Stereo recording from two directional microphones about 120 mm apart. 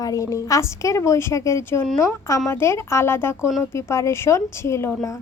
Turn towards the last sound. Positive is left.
turn(degrees=20)  # may be behind; listen again after turning